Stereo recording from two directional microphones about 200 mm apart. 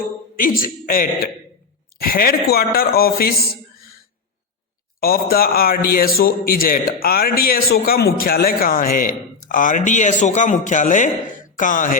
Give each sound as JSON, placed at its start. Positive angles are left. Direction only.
{"t": 0.3, "sound": "a man's voice", "side_deg": 45}
{"t": 4.9, "sound": "a man's voice", "side_deg": 50}